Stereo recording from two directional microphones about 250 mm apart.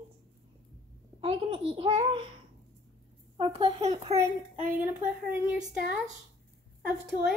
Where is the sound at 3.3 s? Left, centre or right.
Right.